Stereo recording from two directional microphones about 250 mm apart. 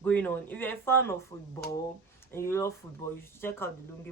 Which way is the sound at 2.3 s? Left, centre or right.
Centre.